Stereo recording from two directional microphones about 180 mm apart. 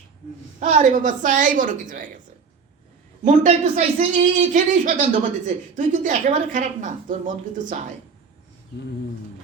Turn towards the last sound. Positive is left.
turn(degrees=-45)  # may be behind; listen again after turning